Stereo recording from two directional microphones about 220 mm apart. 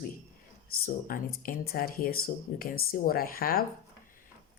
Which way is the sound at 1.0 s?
40° left (ahead or behind).